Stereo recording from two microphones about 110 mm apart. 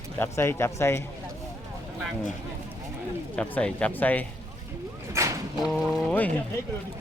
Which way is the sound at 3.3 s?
10° left (ahead or behind).